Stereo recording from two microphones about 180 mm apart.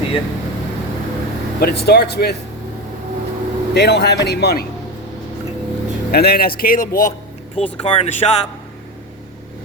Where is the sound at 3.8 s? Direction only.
70° left (ahead or behind).